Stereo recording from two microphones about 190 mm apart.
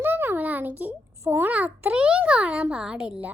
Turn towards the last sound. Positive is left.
turn(degrees=-5)  # may be behind; listen again after turning